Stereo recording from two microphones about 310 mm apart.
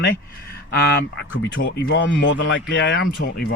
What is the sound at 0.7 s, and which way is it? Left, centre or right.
Speech, left.